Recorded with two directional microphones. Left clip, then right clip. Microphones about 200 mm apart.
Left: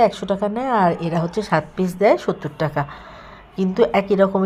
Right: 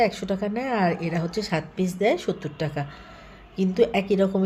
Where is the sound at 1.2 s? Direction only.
65° left (ahead or behind).